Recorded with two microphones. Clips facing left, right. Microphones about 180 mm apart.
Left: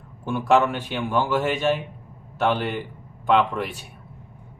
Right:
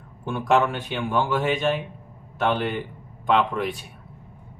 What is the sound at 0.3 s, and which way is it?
A man's voice, 5° left (ahead or behind).